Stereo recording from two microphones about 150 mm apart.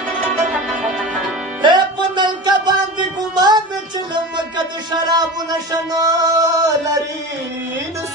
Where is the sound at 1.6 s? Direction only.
30° right (ahead or behind).